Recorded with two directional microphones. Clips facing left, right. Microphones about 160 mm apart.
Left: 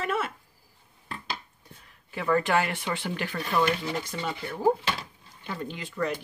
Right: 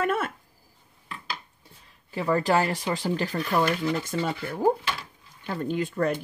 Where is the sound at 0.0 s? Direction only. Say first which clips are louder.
Right 3 dB; 50° right (ahead or behind).